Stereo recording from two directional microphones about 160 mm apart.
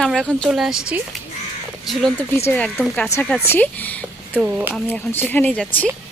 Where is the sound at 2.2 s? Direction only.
15° left (ahead or behind).